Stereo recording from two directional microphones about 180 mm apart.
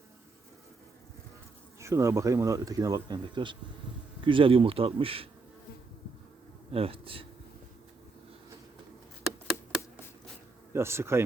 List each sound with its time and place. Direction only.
1.8 s speech: 15° right (ahead or behind)
6.7 s speech: 30° right (ahead or behind)
10.7 s speech: 15° right (ahead or behind)